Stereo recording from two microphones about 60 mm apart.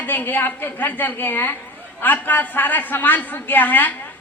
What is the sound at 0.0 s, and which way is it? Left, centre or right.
A woman's voice, left.